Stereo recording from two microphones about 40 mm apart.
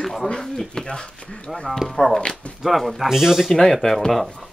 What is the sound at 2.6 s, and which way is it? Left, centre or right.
Speech, centre.